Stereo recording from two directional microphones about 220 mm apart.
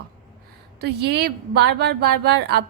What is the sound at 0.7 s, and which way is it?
A woman's voice, 50° right (ahead or behind).